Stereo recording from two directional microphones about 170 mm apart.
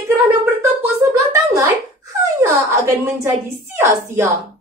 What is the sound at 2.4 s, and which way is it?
Speech, 15° right (ahead or behind).